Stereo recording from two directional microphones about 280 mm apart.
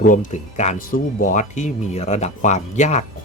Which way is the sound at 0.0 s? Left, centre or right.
Left.